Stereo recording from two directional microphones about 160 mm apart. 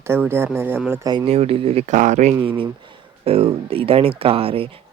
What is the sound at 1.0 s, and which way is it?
Speech, 30° right (ahead or behind).